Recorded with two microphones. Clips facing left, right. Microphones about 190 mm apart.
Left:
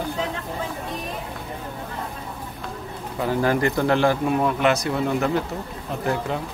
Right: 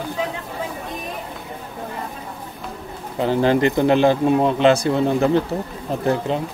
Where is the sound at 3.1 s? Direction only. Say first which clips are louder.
Right 4 dB; 25° right (ahead or behind).